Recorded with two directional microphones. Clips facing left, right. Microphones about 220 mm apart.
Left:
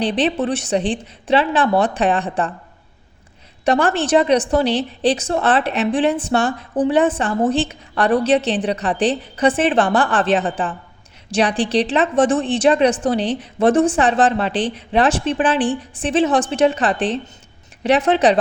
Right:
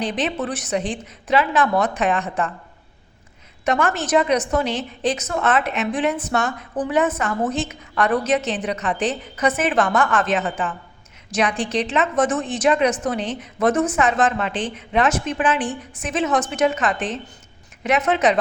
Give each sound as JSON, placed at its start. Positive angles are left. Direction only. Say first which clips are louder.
{"t": 0.0, "sound": "a woman's voice", "louder": "left 5 dB", "side_deg": 30}
{"t": 3.7, "sound": "a woman's voice", "louder": "left 4 dB", "side_deg": 35}